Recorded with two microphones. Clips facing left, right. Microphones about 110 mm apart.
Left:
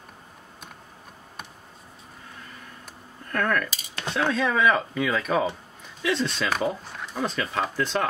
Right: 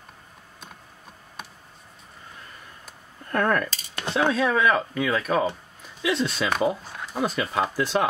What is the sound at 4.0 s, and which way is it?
Speech, 10° right (ahead or behind).